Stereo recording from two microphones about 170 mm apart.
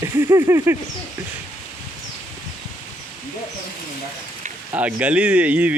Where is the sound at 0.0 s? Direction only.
15° right (ahead or behind).